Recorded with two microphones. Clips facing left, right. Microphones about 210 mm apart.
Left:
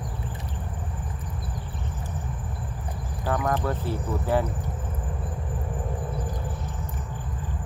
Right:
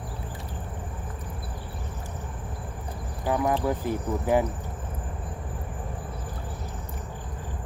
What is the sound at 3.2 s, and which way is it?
Speech, 15° right (ahead or behind).